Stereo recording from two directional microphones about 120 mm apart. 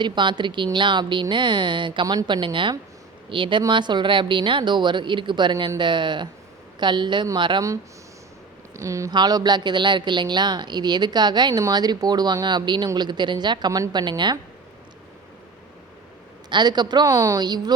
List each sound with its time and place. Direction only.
0.0 s speech: 40° right (ahead or behind)
8.7 s speech: 25° right (ahead or behind)
16.5 s speech: 35° right (ahead or behind)
17.1 s a woman's voice: 25° right (ahead or behind)
17.4 s speech: 35° right (ahead or behind)